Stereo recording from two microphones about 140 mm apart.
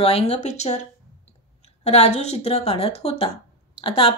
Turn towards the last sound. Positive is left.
turn(degrees=40)  # may be behind; listen again after turning